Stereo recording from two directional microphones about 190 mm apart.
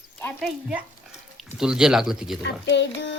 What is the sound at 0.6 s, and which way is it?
Dog, 5° right (ahead or behind).